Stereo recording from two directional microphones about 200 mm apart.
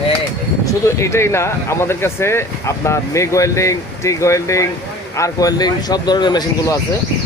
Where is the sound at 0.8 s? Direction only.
15° left (ahead or behind).